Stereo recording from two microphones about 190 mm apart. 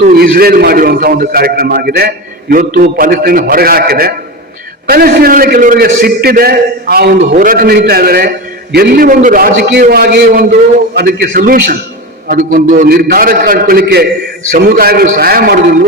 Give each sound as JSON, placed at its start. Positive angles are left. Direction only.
{"t": 0.0, "sound": "a man's voice", "side_deg": -55}